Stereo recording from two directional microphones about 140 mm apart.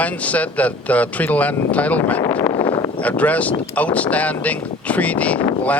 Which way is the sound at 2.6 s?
35° left (ahead or behind).